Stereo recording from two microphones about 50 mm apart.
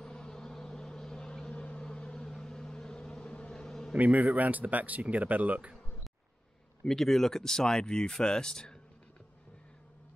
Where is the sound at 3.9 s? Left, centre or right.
Right.